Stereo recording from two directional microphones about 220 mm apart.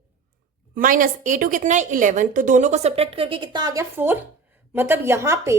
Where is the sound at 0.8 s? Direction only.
40° right (ahead or behind).